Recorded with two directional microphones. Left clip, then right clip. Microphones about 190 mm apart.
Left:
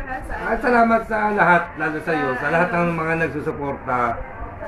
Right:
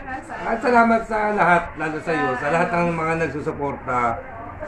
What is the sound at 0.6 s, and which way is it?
Speech, 10° right (ahead or behind).